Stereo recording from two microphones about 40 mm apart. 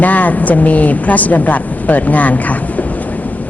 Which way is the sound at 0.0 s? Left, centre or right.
Left.